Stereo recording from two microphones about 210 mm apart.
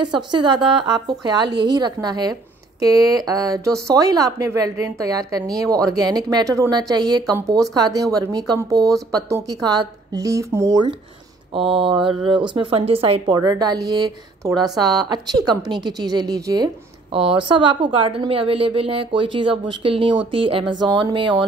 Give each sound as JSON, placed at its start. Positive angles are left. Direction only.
{"t": 0.0, "sound": "a woman's voice", "side_deg": -20}